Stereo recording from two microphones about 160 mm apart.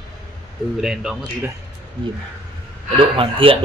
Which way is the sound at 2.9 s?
35° right (ahead or behind).